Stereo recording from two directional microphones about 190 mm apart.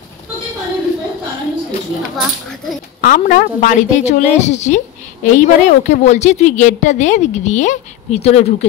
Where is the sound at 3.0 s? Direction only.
45° left (ahead or behind).